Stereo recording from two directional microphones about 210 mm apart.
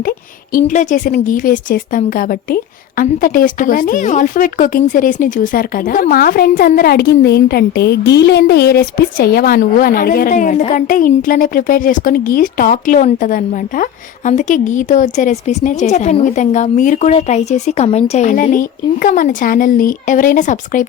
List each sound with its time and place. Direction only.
0.6 s speech: 35° left (ahead or behind)